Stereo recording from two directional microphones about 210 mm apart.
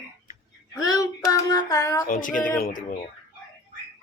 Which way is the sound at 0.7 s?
15° left (ahead or behind).